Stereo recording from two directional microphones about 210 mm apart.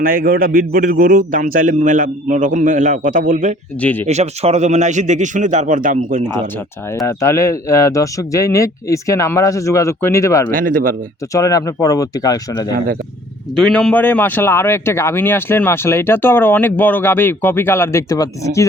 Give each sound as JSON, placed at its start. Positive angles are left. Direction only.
{"t": 0.0, "sound": "a man's voice", "side_deg": -45}
{"t": 3.8, "sound": "speech", "side_deg": 5}
{"t": 4.0, "sound": "a man's voice", "side_deg": -30}
{"t": 6.9, "sound": "speech", "side_deg": 15}
{"t": 10.5, "sound": "a man's voice", "side_deg": -40}
{"t": 11.3, "sound": "speech", "side_deg": 15}
{"t": 13.6, "sound": "speech", "side_deg": 5}